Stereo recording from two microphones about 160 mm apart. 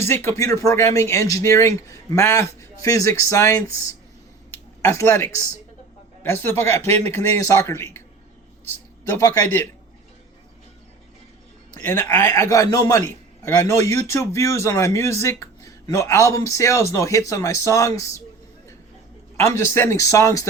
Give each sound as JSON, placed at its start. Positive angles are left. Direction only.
{"t": 0.0, "sound": "speech", "side_deg": 15}
{"t": 4.5, "sound": "a sound", "side_deg": 15}
{"t": 6.2, "sound": "speech", "side_deg": 15}
{"t": 9.2, "sound": "speech", "side_deg": 15}
{"t": 11.7, "sound": "speech", "side_deg": 15}
{"t": 19.4, "sound": "speech", "side_deg": 15}